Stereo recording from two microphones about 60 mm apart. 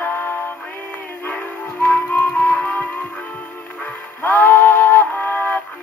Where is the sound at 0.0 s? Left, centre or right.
Left.